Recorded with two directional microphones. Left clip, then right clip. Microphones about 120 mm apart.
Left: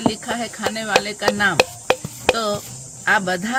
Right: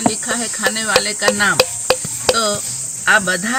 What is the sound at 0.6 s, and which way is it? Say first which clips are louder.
Speech: right 4 dB; 45° left (ahead or behind).